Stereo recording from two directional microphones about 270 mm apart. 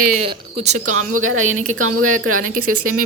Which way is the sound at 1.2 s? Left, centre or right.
Right.